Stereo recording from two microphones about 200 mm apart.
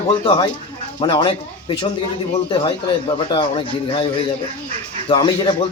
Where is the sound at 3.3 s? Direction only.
25° left (ahead or behind).